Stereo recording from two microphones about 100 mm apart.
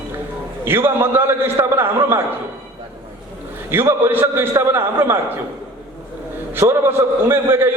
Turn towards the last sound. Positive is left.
turn(degrees=-25)  # may be behind; listen again after turning